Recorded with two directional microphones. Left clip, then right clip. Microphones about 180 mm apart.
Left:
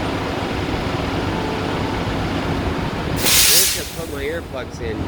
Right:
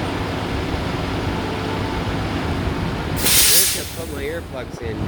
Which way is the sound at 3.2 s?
35° right (ahead or behind).